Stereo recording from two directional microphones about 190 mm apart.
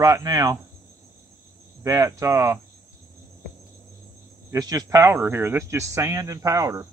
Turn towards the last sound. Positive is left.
turn(degrees=-15)  # may be behind; listen again after turning